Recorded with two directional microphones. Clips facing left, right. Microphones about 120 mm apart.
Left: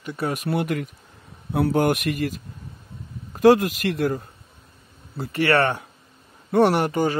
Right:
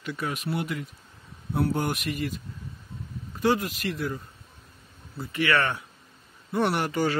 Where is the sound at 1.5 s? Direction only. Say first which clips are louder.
Left 6 dB; 80° left.